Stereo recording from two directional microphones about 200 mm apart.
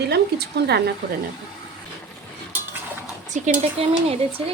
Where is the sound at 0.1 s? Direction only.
55° right (ahead or behind).